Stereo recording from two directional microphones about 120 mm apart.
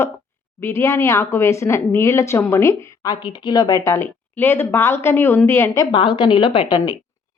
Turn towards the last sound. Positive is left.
turn(degrees=35)  # may be behind; listen again after turning